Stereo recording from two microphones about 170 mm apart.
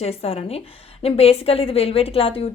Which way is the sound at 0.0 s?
35° left (ahead or behind).